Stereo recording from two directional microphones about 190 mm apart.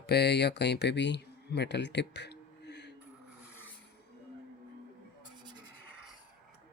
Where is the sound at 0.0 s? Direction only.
60° left (ahead or behind).